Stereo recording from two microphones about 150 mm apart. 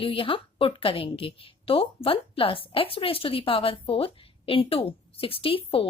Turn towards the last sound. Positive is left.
turn(degrees=35)  # may be behind; listen again after turning